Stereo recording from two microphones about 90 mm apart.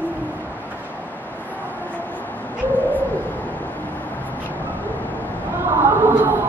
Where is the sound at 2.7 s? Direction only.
20° left (ahead or behind).